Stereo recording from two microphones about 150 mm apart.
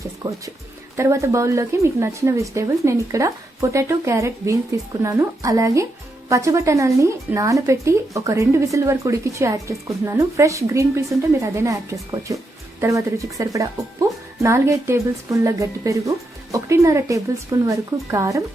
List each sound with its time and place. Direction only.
0.2 s a woman's voice: 20° right (ahead or behind)